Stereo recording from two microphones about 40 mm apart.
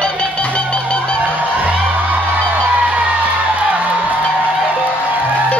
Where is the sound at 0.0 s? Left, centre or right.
Left.